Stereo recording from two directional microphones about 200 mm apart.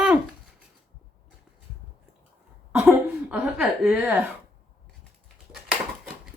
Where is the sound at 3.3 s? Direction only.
5° right (ahead or behind).